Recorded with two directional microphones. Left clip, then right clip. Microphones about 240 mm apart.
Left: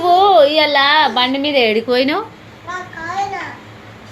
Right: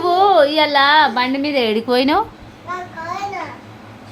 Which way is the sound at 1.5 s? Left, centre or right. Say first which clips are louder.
Left 3 dB; centre.